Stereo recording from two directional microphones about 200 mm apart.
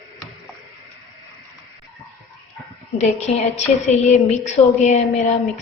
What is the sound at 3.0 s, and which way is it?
A woman's voice, 35° left (ahead or behind).